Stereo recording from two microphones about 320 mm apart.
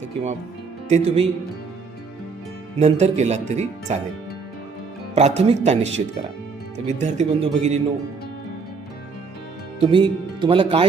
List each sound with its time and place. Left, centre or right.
0.9 s speech: centre
2.7 s speech: right
5.1 s speech: right
9.8 s speech: centre